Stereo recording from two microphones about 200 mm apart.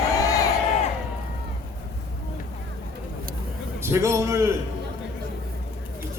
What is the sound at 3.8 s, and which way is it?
Speech, 15° right (ahead or behind).